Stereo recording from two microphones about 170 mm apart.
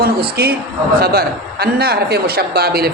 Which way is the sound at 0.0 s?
65° right (ahead or behind).